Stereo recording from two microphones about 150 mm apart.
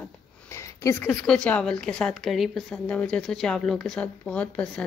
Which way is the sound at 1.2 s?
5° left (ahead or behind).